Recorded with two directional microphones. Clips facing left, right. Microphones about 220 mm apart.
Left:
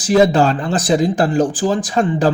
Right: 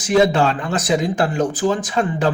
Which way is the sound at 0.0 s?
35° left (ahead or behind).